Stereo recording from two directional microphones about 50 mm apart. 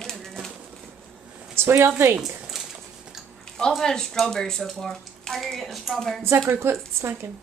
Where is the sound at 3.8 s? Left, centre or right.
Centre.